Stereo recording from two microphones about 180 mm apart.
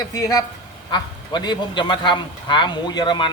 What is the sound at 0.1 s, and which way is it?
Speech, 20° left (ahead or behind).